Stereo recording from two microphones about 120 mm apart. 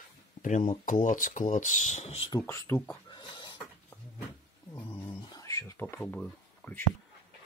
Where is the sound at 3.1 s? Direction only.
40° left (ahead or behind).